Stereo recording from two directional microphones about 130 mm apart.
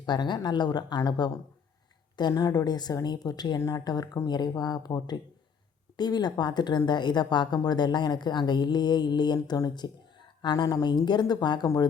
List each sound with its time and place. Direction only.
0.0 s a woman's voice: 35° left (ahead or behind)